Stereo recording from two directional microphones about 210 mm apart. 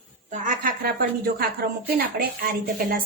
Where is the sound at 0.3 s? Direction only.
35° right (ahead or behind).